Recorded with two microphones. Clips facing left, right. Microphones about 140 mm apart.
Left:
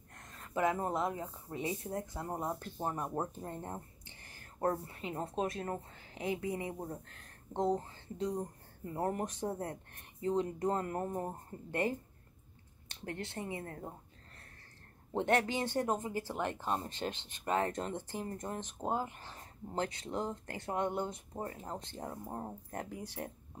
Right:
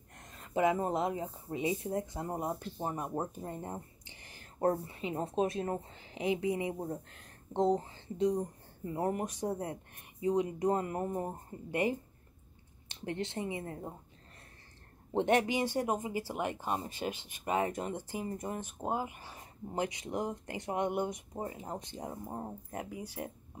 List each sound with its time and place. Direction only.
0.2 s speech: 20° right (ahead or behind)
2.5 s speech: 5° right (ahead or behind)
15.1 s speech: 20° right (ahead or behind)
22.2 s speech: 5° right (ahead or behind)